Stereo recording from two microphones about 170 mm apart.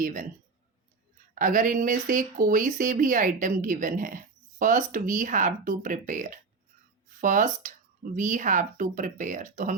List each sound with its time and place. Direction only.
0.0 s speech: 50° right (ahead or behind)
1.4 s speech: 50° right (ahead or behind)